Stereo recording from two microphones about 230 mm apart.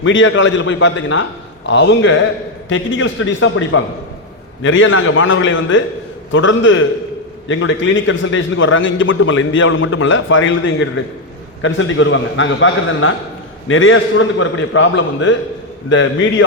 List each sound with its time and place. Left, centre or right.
0.0 s a man's voice: left